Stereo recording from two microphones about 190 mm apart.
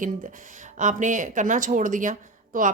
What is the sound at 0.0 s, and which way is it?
Speech, 45° right (ahead or behind).